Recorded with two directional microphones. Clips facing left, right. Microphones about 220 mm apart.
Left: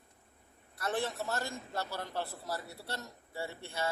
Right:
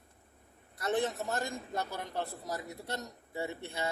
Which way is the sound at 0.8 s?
20° right (ahead or behind).